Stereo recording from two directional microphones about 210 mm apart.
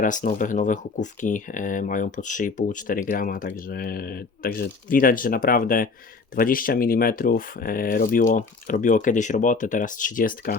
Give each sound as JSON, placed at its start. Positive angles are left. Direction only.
{"t": 0.0, "sound": "speech", "side_deg": 40}